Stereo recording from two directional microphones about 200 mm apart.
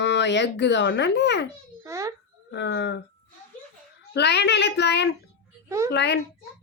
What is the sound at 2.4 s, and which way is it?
Speech, 60° left (ahead or behind).